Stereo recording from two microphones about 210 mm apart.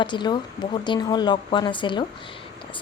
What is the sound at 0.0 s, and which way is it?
Speech, 20° left (ahead or behind).